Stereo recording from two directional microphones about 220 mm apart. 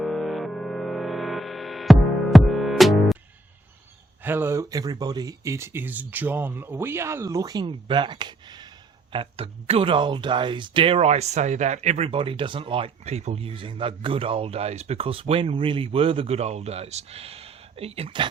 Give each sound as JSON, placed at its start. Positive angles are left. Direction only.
{"t": 0.0, "sound": "music", "side_deg": 0}
{"t": 4.2, "sound": "speech", "side_deg": -10}